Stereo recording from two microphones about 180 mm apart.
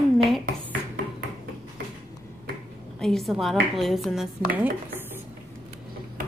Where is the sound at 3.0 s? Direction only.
Centre (ahead or behind).